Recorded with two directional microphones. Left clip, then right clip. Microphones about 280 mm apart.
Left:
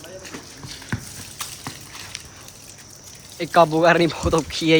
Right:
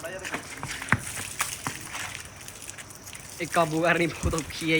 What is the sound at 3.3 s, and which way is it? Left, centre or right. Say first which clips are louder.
Speech: left 9 dB; centre.